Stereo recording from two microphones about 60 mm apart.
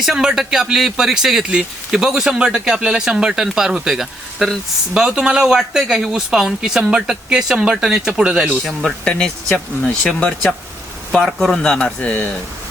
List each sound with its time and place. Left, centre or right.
0.0 s speech: centre
9.0 s speech: centre
11.1 s speech: centre
11.8 s speech: left